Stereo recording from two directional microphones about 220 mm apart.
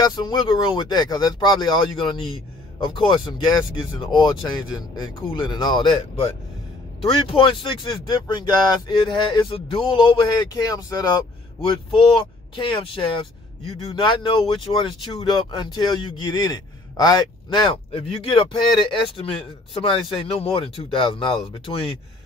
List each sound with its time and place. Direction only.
0.0 s speech: 20° left (ahead or behind)
7.0 s speech: 25° left (ahead or behind)